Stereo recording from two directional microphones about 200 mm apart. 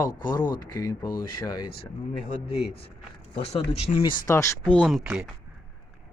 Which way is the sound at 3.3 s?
30° left (ahead or behind).